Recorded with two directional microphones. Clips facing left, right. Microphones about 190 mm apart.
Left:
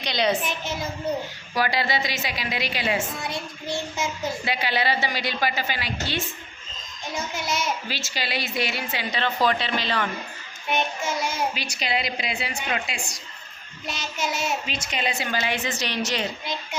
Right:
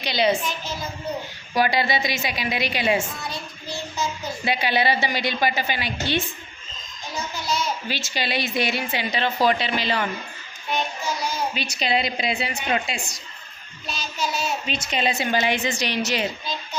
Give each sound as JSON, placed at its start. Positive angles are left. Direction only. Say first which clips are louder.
{"t": 0.0, "sound": "a child's voice", "louder": "right 2 dB", "side_deg": -5}
{"t": 0.4, "sound": "child singing", "louder": "left 1 dB", "side_deg": 25}
{"t": 1.5, "sound": "a woman's voice", "louder": "right 3 dB", "side_deg": -15}
{"t": 3.2, "sound": "child singing", "louder": "left 3 dB", "side_deg": 25}
{"t": 4.4, "sound": "a woman's voice", "louder": "right 5 dB", "side_deg": -15}
{"t": 7.4, "sound": "a sound", "louder": "right 3 dB", "side_deg": 25}
{"t": 7.9, "sound": "a woman's voice", "louder": "right 3 dB", "side_deg": -20}
{"t": 10.7, "sound": "child singing", "louder": "left 1 dB", "side_deg": 25}
{"t": 11.5, "sound": "a woman's voice", "louder": "right 4 dB", "side_deg": -25}
{"t": 14.9, "sound": "a woman's voice", "louder": "right 5 dB", "side_deg": -25}